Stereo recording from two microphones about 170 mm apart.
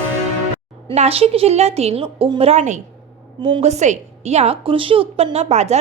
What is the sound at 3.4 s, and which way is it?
A woman's voice, 30° right (ahead or behind).